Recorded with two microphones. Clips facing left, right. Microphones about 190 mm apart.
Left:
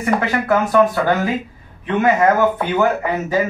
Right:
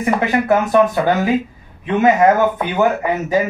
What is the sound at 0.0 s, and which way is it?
Speech, 20° right (ahead or behind).